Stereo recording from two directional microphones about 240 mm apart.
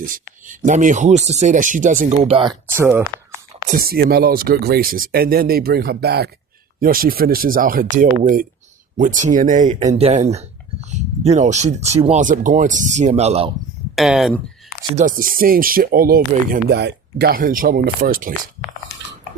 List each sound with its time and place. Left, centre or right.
0.0 s speech: right
2.7 s speech: centre
3.7 s speech: right
13.9 s speech: centre
14.9 s speech: right